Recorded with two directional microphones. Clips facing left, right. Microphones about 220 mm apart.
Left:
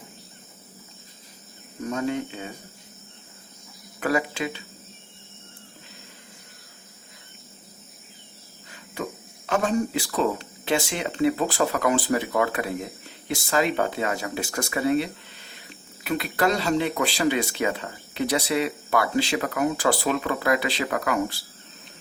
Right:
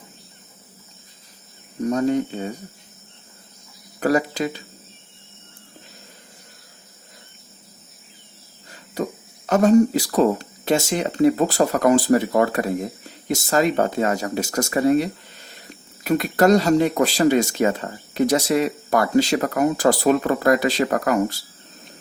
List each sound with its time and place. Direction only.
1.8 s speech: 40° right (ahead or behind)
4.0 s speech: 40° right (ahead or behind)
9.5 s speech: 40° right (ahead or behind)